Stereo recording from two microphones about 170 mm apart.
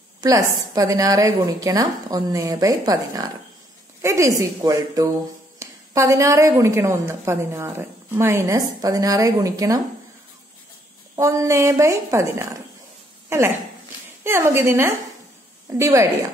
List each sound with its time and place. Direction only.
0.2 s a woman's voice: 20° right (ahead or behind)
11.1 s a woman's voice: 20° right (ahead or behind)
14.2 s a woman's voice: 15° right (ahead or behind)